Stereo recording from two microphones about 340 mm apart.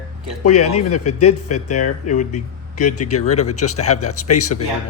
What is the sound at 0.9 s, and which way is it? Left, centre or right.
Speech, left.